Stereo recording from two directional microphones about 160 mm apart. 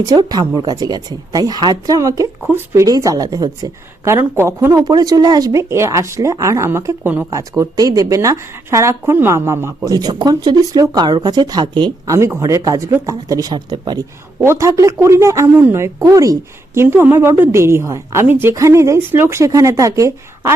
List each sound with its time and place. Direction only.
0.0 s speech: 25° right (ahead or behind)
12.1 s speech: 15° right (ahead or behind)
14.3 s speech: 15° right (ahead or behind)